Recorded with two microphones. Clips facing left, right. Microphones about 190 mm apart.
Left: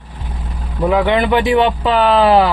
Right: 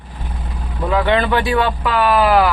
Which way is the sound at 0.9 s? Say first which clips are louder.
Left 2 dB; 15° left (ahead or behind).